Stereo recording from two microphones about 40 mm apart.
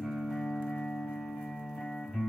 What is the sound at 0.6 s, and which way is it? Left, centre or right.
Music, centre.